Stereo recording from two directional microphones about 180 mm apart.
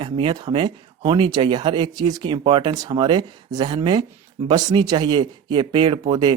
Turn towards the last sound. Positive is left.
turn(degrees=-25)  # may be behind; listen again after turning